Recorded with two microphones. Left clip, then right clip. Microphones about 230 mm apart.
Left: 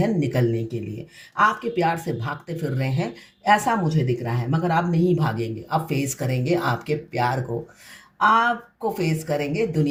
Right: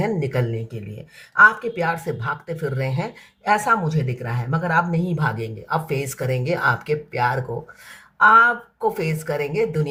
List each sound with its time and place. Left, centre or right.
0.0 s speech: right
9.0 s speech: right